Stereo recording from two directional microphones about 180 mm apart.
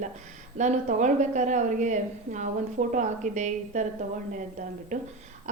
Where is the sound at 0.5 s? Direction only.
40° right (ahead or behind).